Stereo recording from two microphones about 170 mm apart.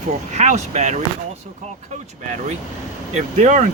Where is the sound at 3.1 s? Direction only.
50° right (ahead or behind).